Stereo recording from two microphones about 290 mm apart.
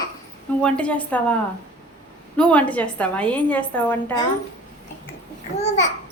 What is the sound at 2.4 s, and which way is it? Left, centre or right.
A woman's voice, centre.